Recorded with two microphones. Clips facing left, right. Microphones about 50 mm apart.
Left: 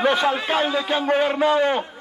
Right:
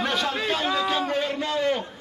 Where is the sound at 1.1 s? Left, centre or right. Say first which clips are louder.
Left 8 dB; left.